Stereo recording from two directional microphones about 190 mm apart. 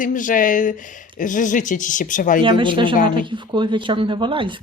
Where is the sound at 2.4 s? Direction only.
25° right (ahead or behind).